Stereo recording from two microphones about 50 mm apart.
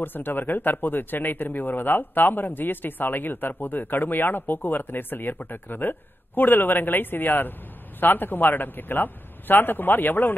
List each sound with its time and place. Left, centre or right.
0.0 s speech: left